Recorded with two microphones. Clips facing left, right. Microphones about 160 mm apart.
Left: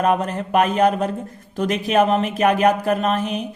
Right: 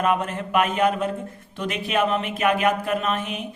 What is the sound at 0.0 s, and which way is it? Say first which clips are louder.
Speech: left 3 dB; 35° left (ahead or behind).